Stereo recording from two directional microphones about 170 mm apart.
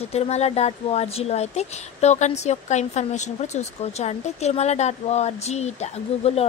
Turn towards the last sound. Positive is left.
turn(degrees=40)  # may be behind; listen again after turning